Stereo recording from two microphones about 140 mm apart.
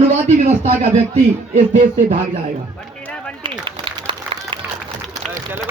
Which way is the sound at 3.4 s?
40° right (ahead or behind).